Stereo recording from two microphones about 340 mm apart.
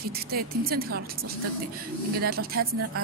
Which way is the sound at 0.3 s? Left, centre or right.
Right.